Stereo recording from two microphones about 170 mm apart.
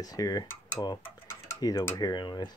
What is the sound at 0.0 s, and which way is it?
Speech, 20° left (ahead or behind).